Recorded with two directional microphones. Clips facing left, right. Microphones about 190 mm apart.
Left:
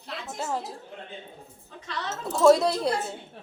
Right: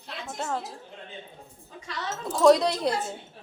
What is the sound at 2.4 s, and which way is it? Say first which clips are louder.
Speech: even; 5° left (ahead or behind).